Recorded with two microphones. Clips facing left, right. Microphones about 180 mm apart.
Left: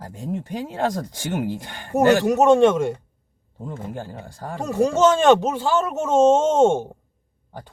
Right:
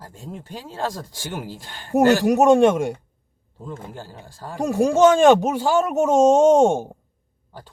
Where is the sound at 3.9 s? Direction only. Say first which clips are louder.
Left 5 dB; 55° left (ahead or behind).